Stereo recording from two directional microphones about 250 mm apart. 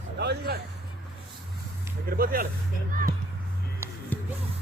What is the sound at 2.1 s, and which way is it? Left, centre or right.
Speech, right.